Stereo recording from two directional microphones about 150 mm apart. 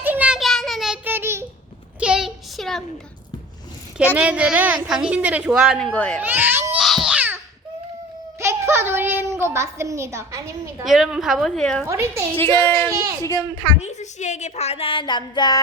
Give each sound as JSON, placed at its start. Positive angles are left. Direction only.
{"t": 0.0, "sound": "a sound", "side_deg": -10}
{"t": 1.0, "sound": "child singing", "side_deg": -15}
{"t": 2.0, "sound": "a sound", "side_deg": -5}
{"t": 4.1, "sound": "a woman's voice", "side_deg": -10}
{"t": 5.8, "sound": "a woman's voice", "side_deg": 5}
{"t": 6.2, "sound": "baby cry", "side_deg": -15}
{"t": 6.7, "sound": "a sound", "side_deg": 0}
{"t": 8.4, "sound": "child singing", "side_deg": -15}
{"t": 9.3, "sound": "a woman's voice", "side_deg": -15}
{"t": 10.8, "sound": "a woman's voice", "side_deg": 0}
{"t": 11.9, "sound": "a woman's voice", "side_deg": -20}
{"t": 12.4, "sound": "speech", "side_deg": 15}
{"t": 13.8, "sound": "speech", "side_deg": 50}